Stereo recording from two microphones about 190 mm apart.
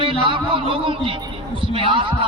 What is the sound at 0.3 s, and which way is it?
A man's voice, 25° right (ahead or behind).